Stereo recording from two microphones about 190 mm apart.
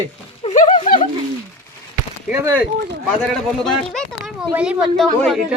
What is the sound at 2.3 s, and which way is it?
Speech, 15° right (ahead or behind).